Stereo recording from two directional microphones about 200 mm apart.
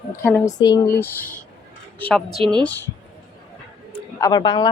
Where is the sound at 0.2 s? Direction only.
10° left (ahead or behind).